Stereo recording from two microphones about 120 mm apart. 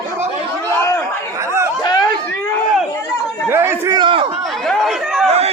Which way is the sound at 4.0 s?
45° right (ahead or behind).